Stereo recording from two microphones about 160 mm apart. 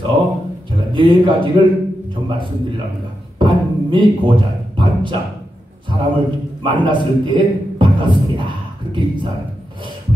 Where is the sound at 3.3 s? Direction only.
30° right (ahead or behind).